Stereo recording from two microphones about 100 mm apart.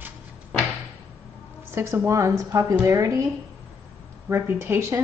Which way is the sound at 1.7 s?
25° right (ahead or behind).